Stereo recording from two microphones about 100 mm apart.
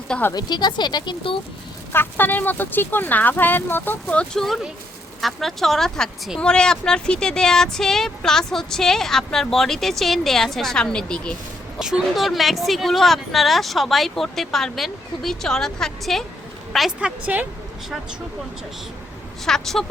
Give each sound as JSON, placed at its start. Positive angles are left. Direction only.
{"t": 0.3, "sound": "speech", "side_deg": 45}
{"t": 1.9, "sound": "speech", "side_deg": 20}
{"t": 11.8, "sound": "speech", "side_deg": -5}
{"t": 17.0, "sound": "speech", "side_deg": -15}
{"t": 19.5, "sound": "speech", "side_deg": 5}